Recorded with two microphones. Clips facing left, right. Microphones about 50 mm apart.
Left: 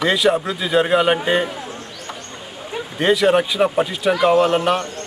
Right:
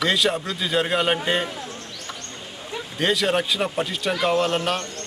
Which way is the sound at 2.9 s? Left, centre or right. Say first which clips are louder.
Left 6 dB; centre.